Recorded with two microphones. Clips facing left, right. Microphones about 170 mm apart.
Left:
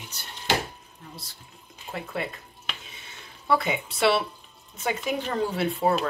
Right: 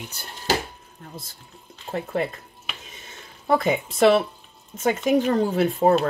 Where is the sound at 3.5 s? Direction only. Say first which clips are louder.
Right 4 dB; 45° right (ahead or behind).